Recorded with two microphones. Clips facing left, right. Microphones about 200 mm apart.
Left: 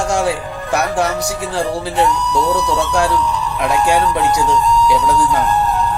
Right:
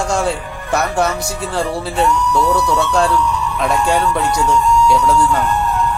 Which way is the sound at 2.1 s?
35° left (ahead or behind).